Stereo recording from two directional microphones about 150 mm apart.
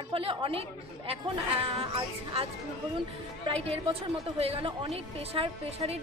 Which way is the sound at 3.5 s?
40° right (ahead or behind).